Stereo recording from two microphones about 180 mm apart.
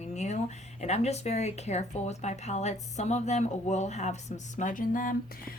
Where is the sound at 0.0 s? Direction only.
40° left (ahead or behind).